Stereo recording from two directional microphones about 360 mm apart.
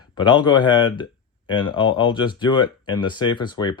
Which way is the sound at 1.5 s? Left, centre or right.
Centre.